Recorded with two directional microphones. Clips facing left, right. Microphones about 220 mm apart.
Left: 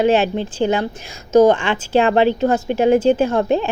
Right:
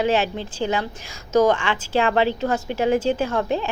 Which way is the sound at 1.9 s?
25° left (ahead or behind).